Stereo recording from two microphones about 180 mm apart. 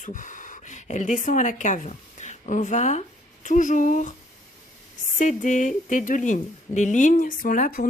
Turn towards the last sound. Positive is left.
turn(degrees=50)  # may be behind; listen again after turning